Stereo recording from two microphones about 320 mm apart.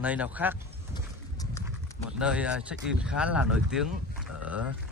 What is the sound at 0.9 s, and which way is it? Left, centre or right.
Horse, centre.